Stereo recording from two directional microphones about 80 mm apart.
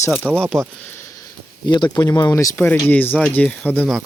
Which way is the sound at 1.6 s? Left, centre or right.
Left.